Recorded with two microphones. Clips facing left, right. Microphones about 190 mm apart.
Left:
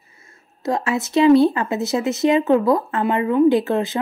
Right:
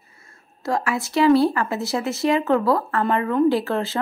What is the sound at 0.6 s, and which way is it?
Speech, 20° left (ahead or behind).